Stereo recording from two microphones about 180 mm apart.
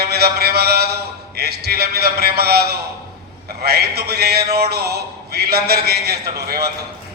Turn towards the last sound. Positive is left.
turn(degrees=-60)  # may be behind; listen again after turning